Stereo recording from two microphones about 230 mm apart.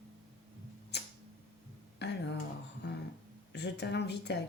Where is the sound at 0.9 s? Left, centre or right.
Left.